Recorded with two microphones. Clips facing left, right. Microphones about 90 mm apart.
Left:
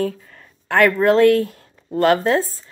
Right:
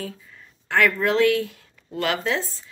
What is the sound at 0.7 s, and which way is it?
A woman's voice, 50° left (ahead or behind).